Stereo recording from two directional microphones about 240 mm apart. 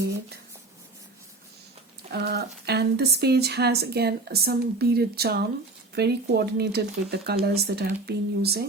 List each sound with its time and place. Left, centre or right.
2.0 s speech: right